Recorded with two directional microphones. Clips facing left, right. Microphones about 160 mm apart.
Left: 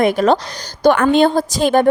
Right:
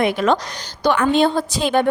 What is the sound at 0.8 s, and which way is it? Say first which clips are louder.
A woman's voice: left 4 dB; 50° left (ahead or behind).